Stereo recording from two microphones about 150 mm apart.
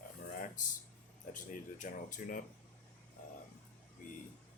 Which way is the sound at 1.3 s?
60° left (ahead or behind).